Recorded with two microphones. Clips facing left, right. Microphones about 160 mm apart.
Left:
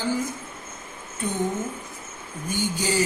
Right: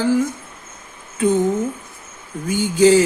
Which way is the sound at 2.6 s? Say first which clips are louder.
Right 13 dB; 90° right.